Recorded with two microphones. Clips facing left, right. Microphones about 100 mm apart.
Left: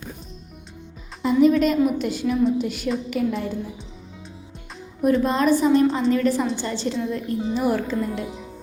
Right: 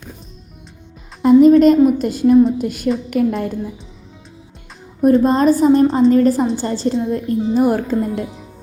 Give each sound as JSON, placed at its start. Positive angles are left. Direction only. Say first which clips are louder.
{"t": 1.2, "sound": "a woman's voice", "louder": "right 9 dB", "side_deg": -45}
{"t": 5.0, "sound": "a woman's voice", "louder": "right 6 dB", "side_deg": -35}